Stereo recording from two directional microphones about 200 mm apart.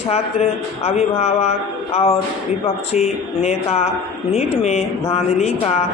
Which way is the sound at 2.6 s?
30° left (ahead or behind).